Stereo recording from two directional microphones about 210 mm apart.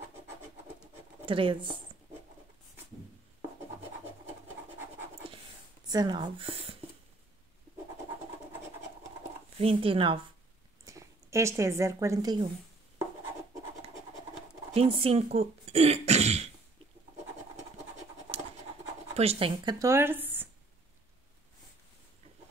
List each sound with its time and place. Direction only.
1.2 s speech: 25° right (ahead or behind)
5.9 s speech: 20° right (ahead or behind)
9.6 s speech: 25° right (ahead or behind)
10.9 s a woman's voice: 15° right (ahead or behind)
14.7 s speech: 25° right (ahead or behind)
19.1 s speech: 30° right (ahead or behind); by 20.4 s 10° right (ahead or behind)